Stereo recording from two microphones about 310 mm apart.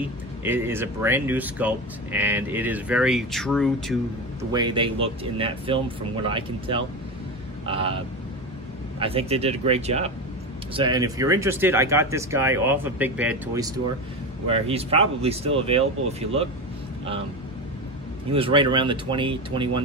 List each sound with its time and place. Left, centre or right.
0.4 s speech: centre
4.5 s speech: centre
9.0 s speech: centre
14.5 s speech: centre
18.3 s speech: centre